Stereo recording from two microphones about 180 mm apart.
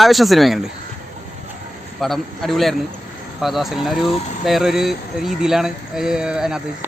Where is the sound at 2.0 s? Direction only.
Centre (ahead or behind).